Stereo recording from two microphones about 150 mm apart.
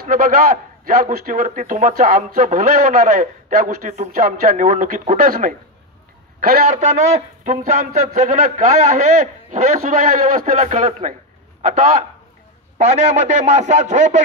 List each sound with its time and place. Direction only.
0.1 s a man's voice: 70° right (ahead or behind)
6.4 s a man's voice: 90° right
6.7 s a man's voice: 55° right (ahead or behind)
11.6 s a man's voice: 65° right (ahead or behind)
12.7 s a man's voice: 50° right (ahead or behind)